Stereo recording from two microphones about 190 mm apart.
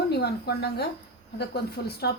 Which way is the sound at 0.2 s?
55° left (ahead or behind).